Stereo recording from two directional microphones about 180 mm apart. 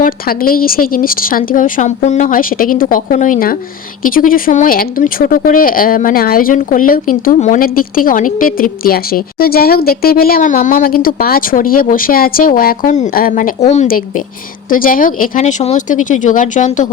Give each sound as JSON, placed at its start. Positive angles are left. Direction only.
{"t": 0.0, "sound": "speech", "side_deg": 55}